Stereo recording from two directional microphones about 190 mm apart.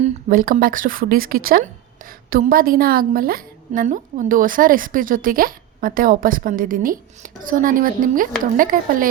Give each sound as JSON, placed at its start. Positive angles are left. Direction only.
{"t": 0.0, "sound": "speech", "side_deg": -45}